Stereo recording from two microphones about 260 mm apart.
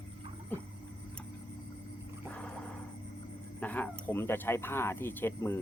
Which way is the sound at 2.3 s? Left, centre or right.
Centre.